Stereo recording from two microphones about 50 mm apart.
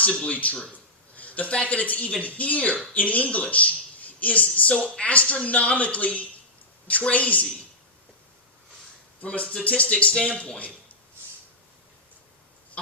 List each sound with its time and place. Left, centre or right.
0.0 s a man's voice: left
9.2 s speech: left